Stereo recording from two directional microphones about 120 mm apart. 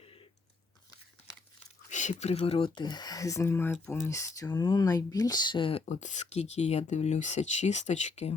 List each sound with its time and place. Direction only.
0.0 s biting: 50° left (ahead or behind)
1.9 s speech: 90° left; by 8.3 s 70° left (ahead or behind)